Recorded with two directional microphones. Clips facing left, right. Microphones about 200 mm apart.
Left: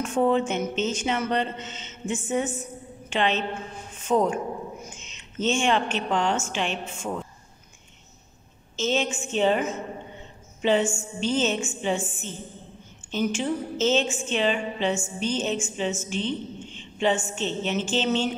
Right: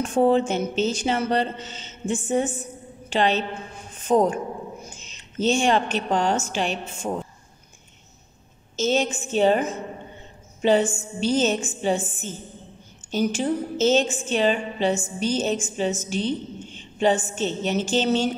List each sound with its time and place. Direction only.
0.0 s a woman's voice: 35° right (ahead or behind)
8.7 s a woman's voice: 40° right (ahead or behind)